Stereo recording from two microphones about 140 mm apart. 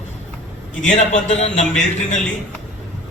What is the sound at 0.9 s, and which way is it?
Speech, 55° left (ahead or behind).